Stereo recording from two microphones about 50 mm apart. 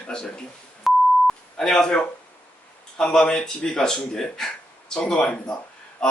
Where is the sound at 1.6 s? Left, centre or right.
Centre.